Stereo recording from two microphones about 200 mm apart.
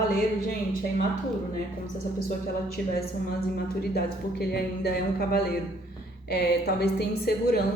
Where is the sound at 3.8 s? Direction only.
50° left (ahead or behind).